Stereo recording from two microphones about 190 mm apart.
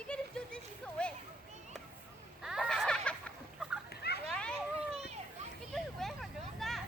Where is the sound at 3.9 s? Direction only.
60° left (ahead or behind).